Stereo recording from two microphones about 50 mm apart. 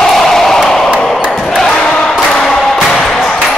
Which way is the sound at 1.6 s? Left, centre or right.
Centre.